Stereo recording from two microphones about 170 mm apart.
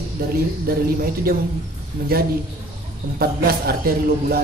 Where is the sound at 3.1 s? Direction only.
65° right (ahead or behind).